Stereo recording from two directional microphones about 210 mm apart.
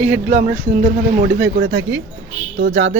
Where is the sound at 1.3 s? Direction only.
50° right (ahead or behind).